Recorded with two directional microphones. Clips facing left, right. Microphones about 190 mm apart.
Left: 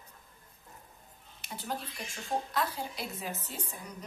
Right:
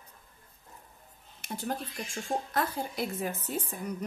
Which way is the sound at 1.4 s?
50° right (ahead or behind).